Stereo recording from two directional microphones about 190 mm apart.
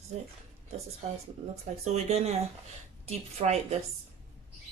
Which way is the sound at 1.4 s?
35° right (ahead or behind).